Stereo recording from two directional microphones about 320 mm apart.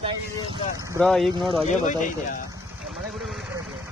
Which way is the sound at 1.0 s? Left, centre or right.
Centre.